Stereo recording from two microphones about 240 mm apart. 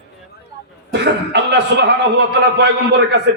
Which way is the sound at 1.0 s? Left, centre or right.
Right.